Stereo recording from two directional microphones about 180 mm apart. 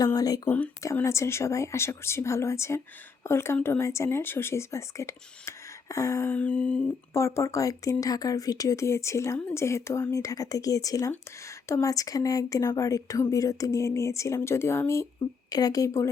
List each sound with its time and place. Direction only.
0.0 s a woman's voice: 20° left (ahead or behind)